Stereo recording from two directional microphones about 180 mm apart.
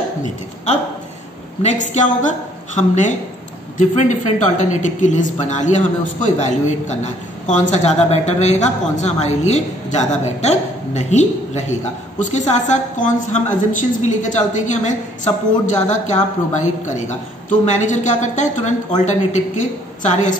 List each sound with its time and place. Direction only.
1.6 s a woman's voice: 40° left (ahead or behind)